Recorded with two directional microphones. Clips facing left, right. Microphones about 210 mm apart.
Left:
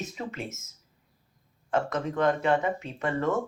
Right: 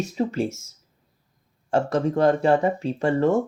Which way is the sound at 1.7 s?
30° right (ahead or behind).